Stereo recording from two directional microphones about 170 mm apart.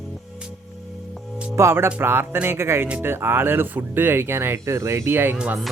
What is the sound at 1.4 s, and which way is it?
Speech, 15° right (ahead or behind).